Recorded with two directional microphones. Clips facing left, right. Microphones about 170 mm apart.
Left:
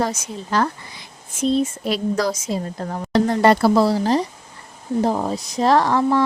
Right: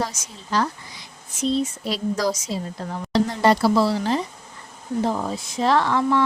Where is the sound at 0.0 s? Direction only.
55° left (ahead or behind).